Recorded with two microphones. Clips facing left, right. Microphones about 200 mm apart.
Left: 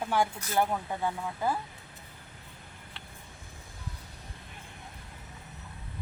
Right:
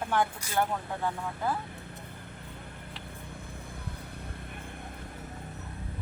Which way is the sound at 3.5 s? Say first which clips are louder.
Right 5 dB; 55° right (ahead or behind).